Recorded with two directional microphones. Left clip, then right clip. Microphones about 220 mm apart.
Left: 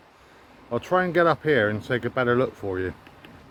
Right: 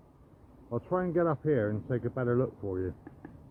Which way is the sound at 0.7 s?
15° left (ahead or behind).